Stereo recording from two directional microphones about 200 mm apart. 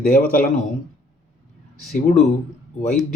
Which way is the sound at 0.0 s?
50° left (ahead or behind).